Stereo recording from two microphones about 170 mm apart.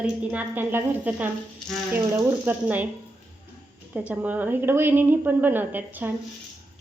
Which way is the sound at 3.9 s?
10° right (ahead or behind).